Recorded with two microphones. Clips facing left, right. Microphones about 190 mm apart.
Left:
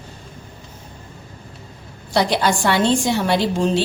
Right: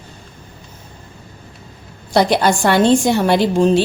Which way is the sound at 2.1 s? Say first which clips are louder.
Right 4 dB; 50° right (ahead or behind).